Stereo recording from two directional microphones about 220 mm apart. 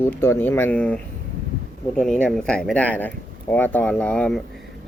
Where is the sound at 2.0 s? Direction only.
5° left (ahead or behind).